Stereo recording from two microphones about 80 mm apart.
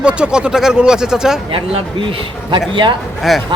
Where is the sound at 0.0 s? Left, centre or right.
Centre.